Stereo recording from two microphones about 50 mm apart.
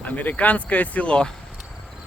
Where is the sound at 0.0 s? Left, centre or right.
Left.